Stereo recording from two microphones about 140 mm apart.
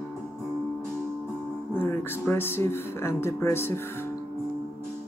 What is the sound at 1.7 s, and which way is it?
Speech, 15° left (ahead or behind).